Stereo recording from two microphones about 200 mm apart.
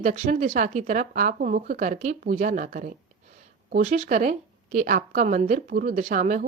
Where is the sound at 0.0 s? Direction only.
40° right (ahead or behind).